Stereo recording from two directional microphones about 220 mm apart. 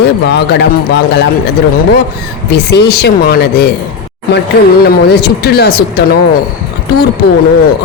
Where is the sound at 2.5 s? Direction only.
50° left (ahead or behind).